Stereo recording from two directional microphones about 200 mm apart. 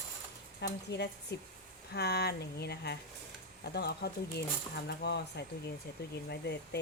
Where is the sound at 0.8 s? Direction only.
55° left (ahead or behind).